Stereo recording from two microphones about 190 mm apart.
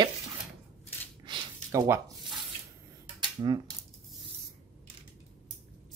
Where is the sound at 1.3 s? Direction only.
15° right (ahead or behind).